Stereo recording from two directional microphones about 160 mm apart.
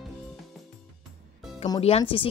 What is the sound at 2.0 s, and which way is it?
Speech, 35° left (ahead or behind).